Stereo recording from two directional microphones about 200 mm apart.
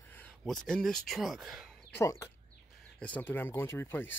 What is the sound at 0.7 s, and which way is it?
Speech, centre (ahead or behind).